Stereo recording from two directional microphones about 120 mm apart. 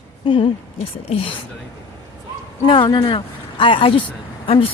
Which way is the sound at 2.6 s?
45° left (ahead or behind).